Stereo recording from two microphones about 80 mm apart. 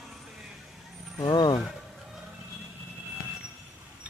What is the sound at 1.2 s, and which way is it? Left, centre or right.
Speech, left.